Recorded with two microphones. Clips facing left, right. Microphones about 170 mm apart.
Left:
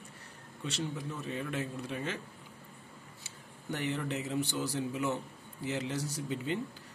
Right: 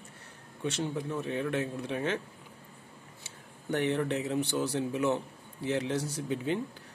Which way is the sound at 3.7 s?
60° right (ahead or behind).